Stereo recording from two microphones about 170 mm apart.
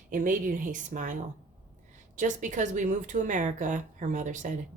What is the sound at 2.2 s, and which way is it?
Speech, 45° right (ahead or behind).